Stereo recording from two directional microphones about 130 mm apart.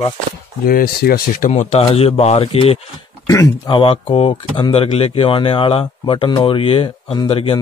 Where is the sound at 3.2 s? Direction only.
25° left (ahead or behind).